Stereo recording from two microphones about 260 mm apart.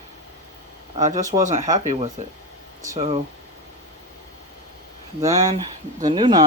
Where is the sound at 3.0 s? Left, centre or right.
Right.